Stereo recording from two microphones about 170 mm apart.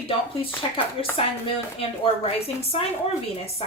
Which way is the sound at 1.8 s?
35° left (ahead or behind).